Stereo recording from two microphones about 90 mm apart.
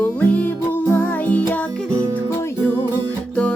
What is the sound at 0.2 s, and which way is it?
Music, 20° left (ahead or behind).